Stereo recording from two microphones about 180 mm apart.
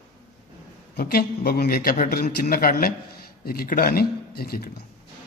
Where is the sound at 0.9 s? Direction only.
60° left (ahead or behind).